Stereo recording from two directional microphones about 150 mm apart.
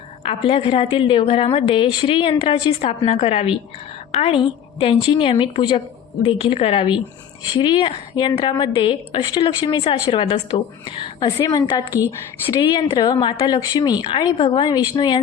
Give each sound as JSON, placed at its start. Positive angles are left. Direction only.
{"t": 0.2, "sound": "a woman's voice", "side_deg": 40}
{"t": 10.8, "sound": "a woman's voice", "side_deg": 25}